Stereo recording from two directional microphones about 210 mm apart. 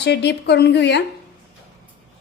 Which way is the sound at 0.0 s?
55° left (ahead or behind).